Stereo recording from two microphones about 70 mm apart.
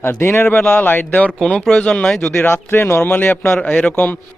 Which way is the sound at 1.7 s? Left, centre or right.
Centre.